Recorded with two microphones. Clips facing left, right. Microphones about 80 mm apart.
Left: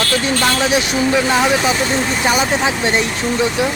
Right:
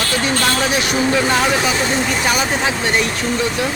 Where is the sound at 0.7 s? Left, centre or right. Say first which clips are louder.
Left 1 dB; centre.